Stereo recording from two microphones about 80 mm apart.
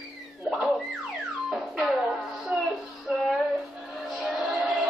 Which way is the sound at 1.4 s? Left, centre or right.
Centre.